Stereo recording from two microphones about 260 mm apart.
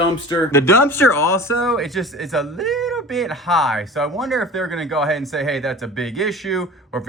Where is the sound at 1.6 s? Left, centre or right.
Centre.